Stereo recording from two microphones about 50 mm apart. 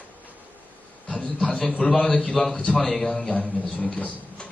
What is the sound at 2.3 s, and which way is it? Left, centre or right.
A man's voice, centre.